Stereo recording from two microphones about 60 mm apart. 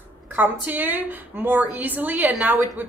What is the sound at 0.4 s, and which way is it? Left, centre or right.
A woman's voice, right.